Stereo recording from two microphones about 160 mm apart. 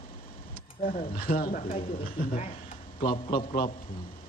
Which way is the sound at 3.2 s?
35° left (ahead or behind).